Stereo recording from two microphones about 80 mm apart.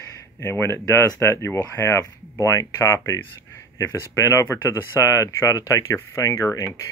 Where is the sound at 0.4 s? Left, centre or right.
Left.